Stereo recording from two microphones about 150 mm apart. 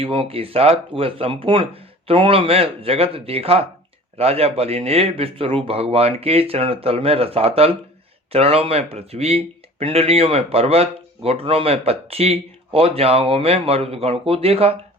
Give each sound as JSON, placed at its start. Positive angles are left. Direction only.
{"t": 0.0, "sound": "speech", "side_deg": -40}